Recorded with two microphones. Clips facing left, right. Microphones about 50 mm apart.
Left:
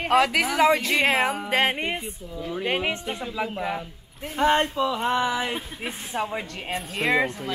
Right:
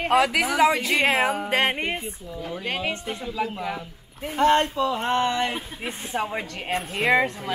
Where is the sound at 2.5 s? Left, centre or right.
Left.